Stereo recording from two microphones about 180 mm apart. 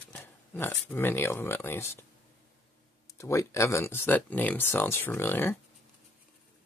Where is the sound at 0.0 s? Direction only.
10° left (ahead or behind).